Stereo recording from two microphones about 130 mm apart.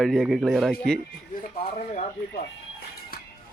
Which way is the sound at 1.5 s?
60° left (ahead or behind).